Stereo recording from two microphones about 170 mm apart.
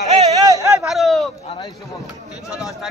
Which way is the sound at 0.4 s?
20° right (ahead or behind).